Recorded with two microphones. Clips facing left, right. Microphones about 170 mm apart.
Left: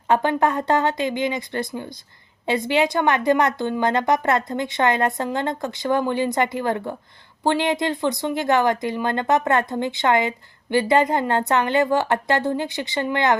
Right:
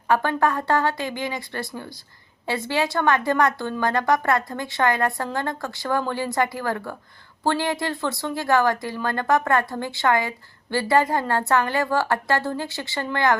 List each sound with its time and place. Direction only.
0.1 s speech: 20° left (ahead or behind)